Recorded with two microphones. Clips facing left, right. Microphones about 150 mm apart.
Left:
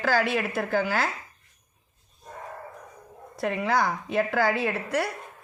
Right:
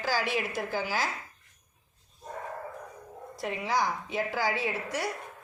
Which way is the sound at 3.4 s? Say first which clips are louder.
Left 5 dB; 60° left (ahead or behind).